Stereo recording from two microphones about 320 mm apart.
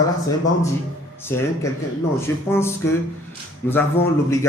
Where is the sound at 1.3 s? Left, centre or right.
Centre.